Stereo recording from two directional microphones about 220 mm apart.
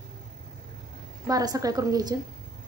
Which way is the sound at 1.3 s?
15° right (ahead or behind).